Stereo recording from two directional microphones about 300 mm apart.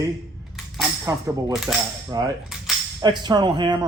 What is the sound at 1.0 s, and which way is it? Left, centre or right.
A man's voice, centre.